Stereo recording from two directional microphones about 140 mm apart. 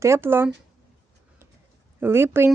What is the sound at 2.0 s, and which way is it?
Speech, 15° right (ahead or behind).